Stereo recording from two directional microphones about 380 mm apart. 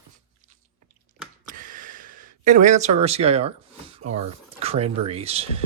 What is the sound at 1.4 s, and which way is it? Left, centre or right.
Gasp, right.